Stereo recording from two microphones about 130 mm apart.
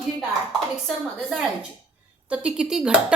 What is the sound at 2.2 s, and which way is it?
Speech, 10° right (ahead or behind).